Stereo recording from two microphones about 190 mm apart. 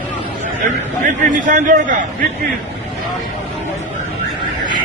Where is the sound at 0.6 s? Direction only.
40° right (ahead or behind).